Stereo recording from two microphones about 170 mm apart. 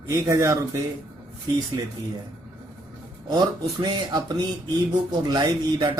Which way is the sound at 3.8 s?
25° right (ahead or behind).